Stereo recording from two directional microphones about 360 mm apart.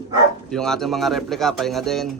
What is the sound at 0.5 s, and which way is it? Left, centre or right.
Speech, centre.